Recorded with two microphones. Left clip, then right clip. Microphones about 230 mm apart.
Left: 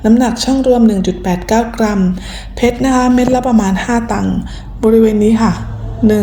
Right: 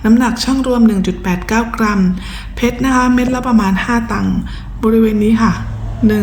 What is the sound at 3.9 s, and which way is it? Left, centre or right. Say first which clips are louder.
Speech: left 1 dB; right.